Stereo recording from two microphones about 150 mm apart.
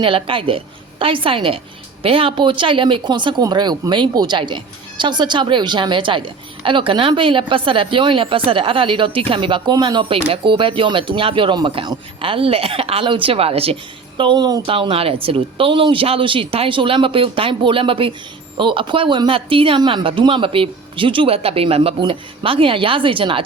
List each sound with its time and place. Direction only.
0.0 s a woman's voice: 35° right (ahead or behind)
14.2 s a woman's voice: 30° right (ahead or behind)
14.7 s a woman's voice: 35° right (ahead or behind)